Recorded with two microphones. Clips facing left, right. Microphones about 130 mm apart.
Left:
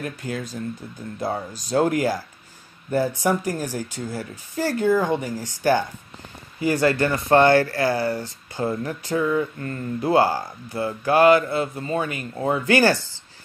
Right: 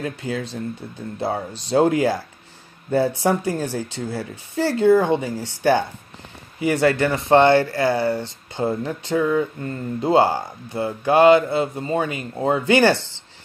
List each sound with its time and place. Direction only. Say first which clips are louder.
0.0 s speech: right 3 dB; 25° right (ahead or behind)
3.5 s speech: right 3 dB; 15° left (ahead or behind)
3.9 s speech: right 2 dB; 30° right (ahead or behind)